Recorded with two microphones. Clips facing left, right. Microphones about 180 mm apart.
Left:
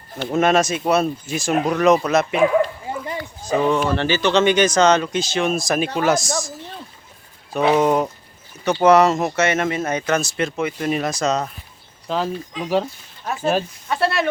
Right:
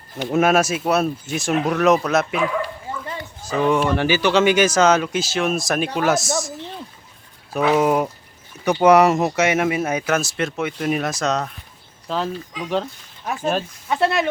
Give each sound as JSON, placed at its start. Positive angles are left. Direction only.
{"t": 0.3, "sound": "speech", "side_deg": -5}
{"t": 2.9, "sound": "bow-wow", "side_deg": 15}
{"t": 3.4, "sound": "speech", "side_deg": -5}
{"t": 7.8, "sound": "speech", "side_deg": -5}
{"t": 13.8, "sound": "speech", "side_deg": -15}